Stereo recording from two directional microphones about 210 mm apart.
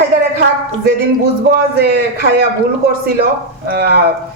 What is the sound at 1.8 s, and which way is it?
Speech, 45° right (ahead or behind).